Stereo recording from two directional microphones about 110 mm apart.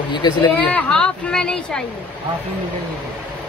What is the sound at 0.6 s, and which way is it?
Speech, 10° left (ahead or behind).